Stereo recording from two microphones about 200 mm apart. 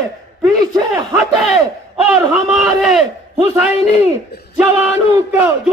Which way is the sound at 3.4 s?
15° right (ahead or behind).